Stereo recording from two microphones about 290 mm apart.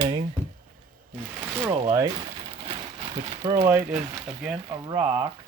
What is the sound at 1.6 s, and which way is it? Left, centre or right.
Speech, centre.